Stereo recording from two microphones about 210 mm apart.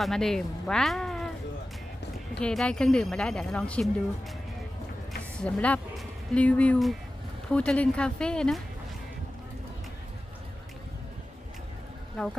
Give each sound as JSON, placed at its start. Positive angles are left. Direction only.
{"t": 0.0, "sound": "speech", "side_deg": 0}
{"t": 2.4, "sound": "a woman's voice", "side_deg": 5}
{"t": 5.4, "sound": "a woman's voice", "side_deg": 5}
{"t": 12.1, "sound": "speech", "side_deg": 5}